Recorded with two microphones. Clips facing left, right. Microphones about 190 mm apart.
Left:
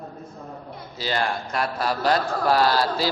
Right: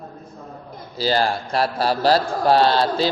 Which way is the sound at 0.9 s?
35° right (ahead or behind).